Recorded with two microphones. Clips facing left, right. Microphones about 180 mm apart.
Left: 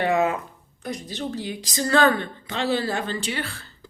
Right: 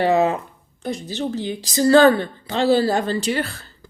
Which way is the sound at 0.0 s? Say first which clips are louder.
Right 4 dB; 30° right (ahead or behind).